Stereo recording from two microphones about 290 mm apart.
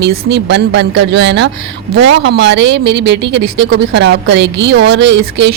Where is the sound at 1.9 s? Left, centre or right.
Right.